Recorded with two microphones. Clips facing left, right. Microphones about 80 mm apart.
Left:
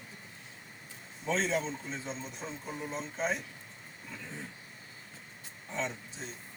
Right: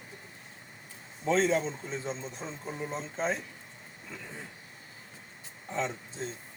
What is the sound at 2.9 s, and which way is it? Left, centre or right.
Speech, right.